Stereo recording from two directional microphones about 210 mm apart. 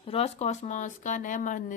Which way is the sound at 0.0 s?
30° left (ahead or behind).